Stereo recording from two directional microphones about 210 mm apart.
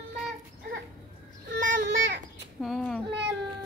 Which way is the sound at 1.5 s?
40° right (ahead or behind).